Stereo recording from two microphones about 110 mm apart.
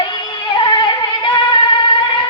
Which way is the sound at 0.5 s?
45° left (ahead or behind).